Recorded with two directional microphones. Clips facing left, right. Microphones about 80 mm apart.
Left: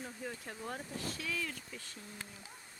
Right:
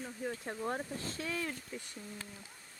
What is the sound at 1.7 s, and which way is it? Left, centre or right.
Speech, centre.